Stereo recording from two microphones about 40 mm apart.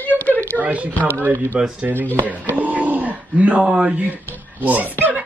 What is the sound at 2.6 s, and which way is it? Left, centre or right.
Speech, right.